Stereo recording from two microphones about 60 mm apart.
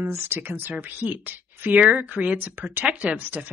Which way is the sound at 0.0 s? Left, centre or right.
Right.